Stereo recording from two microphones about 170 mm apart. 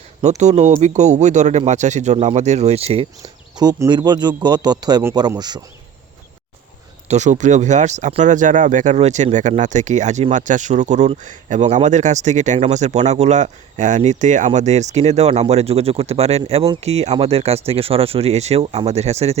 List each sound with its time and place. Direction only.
0.2 s speech: 40° right (ahead or behind)
3.6 s a man's voice: 25° right (ahead or behind)
7.1 s speech: 45° right (ahead or behind)